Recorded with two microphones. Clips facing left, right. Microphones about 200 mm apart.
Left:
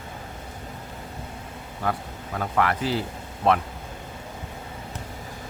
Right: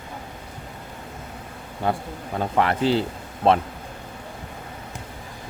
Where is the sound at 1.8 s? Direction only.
25° right (ahead or behind).